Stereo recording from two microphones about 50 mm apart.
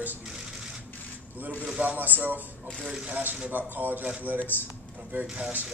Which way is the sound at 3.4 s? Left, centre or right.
Right.